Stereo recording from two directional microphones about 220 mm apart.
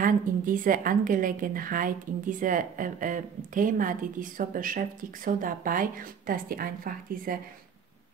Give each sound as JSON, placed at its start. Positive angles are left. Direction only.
{"t": 0.0, "sound": "a woman's voice", "side_deg": -40}